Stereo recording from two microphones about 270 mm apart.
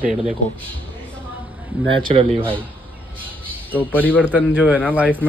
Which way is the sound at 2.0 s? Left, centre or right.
Centre.